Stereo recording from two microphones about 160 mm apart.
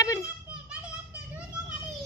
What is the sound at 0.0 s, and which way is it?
Children playing, 20° left (ahead or behind).